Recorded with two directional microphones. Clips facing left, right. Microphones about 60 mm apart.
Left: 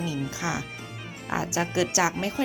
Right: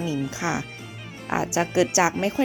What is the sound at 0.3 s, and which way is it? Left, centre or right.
A woman's voice, right.